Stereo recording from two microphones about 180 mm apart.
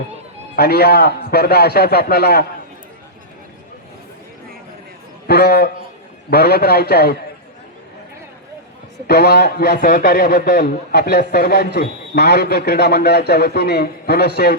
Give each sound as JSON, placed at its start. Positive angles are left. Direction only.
{"t": 0.5, "sound": "a man's voice", "side_deg": 60}
{"t": 5.3, "sound": "a man's voice", "side_deg": 60}
{"t": 9.0, "sound": "a man's voice", "side_deg": 60}